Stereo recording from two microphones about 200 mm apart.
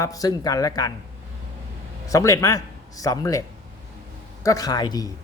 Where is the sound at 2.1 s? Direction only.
15° left (ahead or behind).